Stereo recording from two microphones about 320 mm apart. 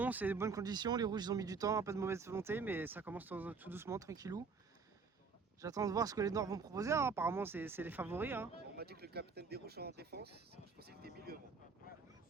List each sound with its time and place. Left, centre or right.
0.0 s speech: centre
5.6 s speech: centre
8.7 s speech: right